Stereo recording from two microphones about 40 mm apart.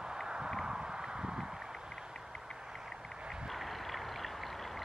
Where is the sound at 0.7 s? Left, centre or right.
Centre.